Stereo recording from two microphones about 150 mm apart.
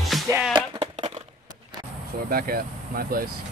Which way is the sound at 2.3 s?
75° right (ahead or behind).